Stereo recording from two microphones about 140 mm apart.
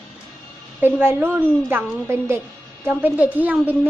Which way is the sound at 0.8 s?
15° right (ahead or behind).